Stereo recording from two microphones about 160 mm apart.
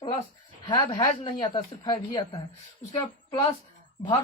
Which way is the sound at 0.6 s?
30° left (ahead or behind).